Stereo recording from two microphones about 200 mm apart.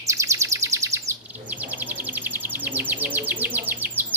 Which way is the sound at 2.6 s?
10° right (ahead or behind).